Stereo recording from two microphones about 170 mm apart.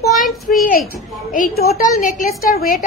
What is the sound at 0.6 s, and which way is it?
A child's voice, 50° left (ahead or behind).